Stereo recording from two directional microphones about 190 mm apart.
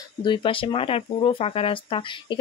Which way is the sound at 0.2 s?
25° left (ahead or behind).